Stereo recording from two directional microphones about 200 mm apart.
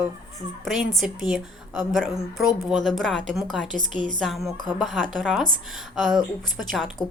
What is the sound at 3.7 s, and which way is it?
Speech, 40° right (ahead or behind).